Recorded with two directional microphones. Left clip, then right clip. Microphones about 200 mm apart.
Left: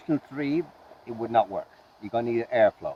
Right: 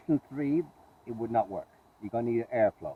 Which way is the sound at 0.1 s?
5° left (ahead or behind).